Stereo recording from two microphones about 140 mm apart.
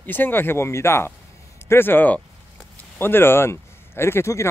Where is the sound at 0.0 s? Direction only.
15° left (ahead or behind).